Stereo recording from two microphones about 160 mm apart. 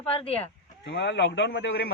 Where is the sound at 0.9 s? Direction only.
90° left.